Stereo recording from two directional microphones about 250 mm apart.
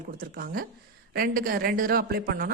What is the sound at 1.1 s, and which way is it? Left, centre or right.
A woman's voice, right.